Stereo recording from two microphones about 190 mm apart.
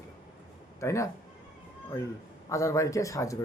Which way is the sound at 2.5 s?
15° left (ahead or behind).